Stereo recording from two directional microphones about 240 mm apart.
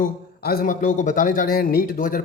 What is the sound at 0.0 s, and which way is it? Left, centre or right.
Speech, left.